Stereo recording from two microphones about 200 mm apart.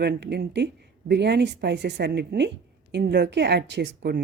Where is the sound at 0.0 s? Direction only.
55° right (ahead or behind).